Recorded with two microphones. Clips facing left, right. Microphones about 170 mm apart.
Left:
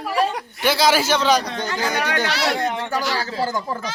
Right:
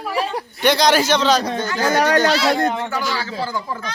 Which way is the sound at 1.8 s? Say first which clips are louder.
Right 8 dB; 40° right (ahead or behind).